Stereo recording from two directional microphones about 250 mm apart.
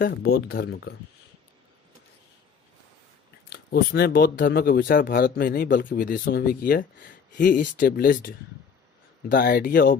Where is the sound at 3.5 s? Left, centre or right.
Left.